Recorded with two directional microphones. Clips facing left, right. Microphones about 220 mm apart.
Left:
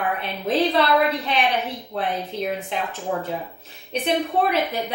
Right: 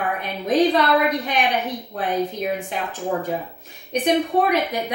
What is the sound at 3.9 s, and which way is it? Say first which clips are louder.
A woman's voice: right 3 dB; 15° right (ahead or behind).